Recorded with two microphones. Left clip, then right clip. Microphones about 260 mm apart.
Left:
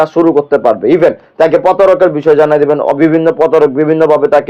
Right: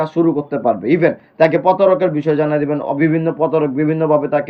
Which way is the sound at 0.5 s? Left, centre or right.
Centre.